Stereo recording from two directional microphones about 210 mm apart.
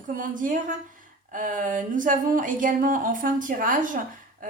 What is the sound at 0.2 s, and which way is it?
Speech, 40° right (ahead or behind).